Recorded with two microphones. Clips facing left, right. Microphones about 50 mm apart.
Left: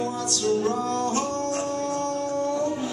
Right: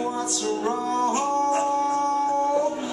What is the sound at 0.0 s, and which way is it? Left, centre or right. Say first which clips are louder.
Music: even; centre.